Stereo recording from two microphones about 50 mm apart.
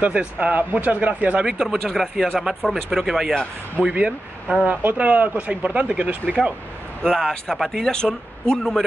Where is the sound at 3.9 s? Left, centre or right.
Right.